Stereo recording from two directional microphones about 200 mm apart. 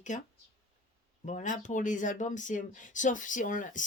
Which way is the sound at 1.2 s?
40° left (ahead or behind).